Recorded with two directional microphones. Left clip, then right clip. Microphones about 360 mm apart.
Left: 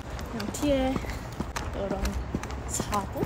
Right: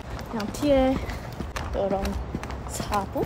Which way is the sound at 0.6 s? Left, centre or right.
Centre.